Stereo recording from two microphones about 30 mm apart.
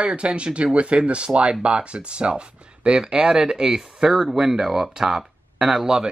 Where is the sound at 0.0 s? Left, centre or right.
Right.